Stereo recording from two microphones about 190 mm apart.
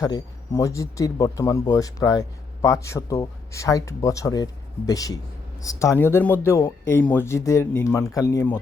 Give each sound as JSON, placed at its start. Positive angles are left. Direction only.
{"t": 0.0, "sound": "speech", "side_deg": 15}